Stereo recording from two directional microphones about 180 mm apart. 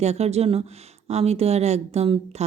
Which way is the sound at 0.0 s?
35° right (ahead or behind).